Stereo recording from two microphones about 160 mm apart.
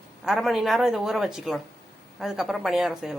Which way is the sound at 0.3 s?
Centre (ahead or behind).